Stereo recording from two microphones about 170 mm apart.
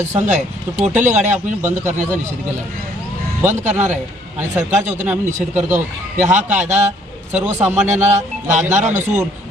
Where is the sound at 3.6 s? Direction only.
45° right (ahead or behind).